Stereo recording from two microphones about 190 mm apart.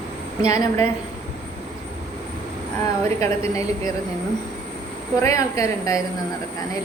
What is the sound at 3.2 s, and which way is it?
Speech, 15° left (ahead or behind).